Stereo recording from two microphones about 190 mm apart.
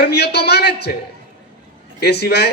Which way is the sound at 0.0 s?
60° left (ahead or behind).